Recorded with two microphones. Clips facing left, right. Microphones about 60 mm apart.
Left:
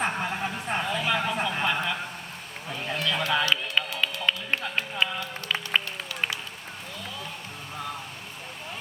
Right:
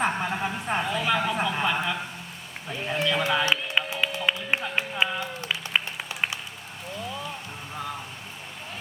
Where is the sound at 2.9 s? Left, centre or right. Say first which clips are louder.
Right 2 dB; right.